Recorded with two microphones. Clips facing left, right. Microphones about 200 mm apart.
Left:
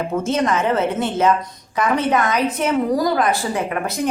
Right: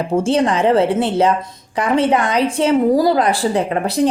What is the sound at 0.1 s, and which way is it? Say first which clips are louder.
A woman's voice: right 5 dB; 30° right (ahead or behind).